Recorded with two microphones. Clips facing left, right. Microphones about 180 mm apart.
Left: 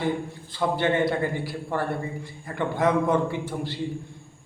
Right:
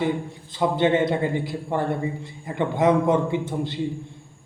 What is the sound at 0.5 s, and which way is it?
A man's voice, 20° right (ahead or behind).